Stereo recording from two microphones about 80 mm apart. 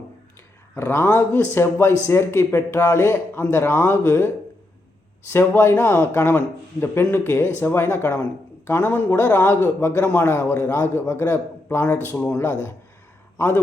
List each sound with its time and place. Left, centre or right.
0.8 s speech: left
5.3 s a man's voice: left